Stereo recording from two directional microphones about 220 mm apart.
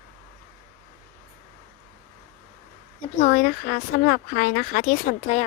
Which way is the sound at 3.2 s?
40° left (ahead or behind).